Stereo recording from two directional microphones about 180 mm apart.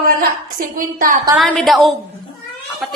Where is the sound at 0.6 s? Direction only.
50° right (ahead or behind).